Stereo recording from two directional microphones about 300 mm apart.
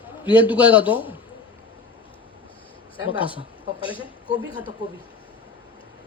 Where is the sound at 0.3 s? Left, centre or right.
Centre.